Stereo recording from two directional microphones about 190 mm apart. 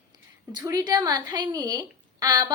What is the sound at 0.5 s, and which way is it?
Child singing, 20° right (ahead or behind).